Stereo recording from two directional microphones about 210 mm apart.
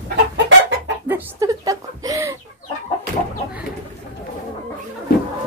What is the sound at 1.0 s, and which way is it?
Chicken, 10° right (ahead or behind).